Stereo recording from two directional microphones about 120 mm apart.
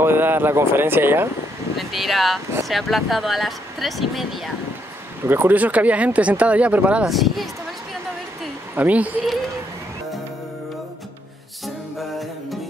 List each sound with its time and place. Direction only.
0.0 s speech: 20° right (ahead or behind)
1.8 s speech: centre (ahead or behind)
5.2 s speech: 20° right (ahead or behind); by 7.4 s centre (ahead or behind)
8.7 s speech: 10° right (ahead or behind)
11.6 s music: centre (ahead or behind)